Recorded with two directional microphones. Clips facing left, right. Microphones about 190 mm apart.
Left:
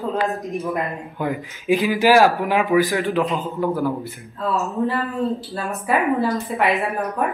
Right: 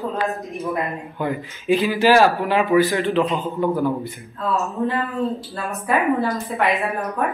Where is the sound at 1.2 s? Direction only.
15° left (ahead or behind).